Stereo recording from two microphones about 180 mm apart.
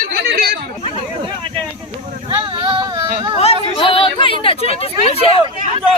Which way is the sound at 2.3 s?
30° right (ahead or behind).